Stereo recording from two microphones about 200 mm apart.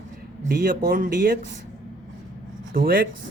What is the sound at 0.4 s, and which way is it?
Speech, 45° right (ahead or behind).